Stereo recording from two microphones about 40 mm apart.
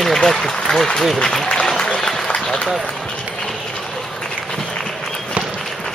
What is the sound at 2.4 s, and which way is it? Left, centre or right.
Run, centre.